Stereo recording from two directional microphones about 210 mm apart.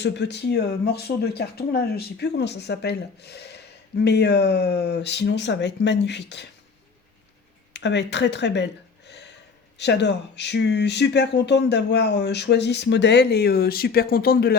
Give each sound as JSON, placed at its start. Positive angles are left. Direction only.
{"t": 0.0, "sound": "speech", "side_deg": 55}
{"t": 7.7, "sound": "speech", "side_deg": 55}